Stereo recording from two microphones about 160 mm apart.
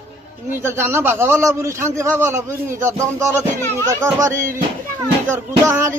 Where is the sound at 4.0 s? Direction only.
20° right (ahead or behind).